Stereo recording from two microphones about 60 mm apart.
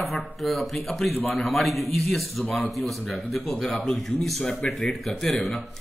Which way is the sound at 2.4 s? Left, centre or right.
Left.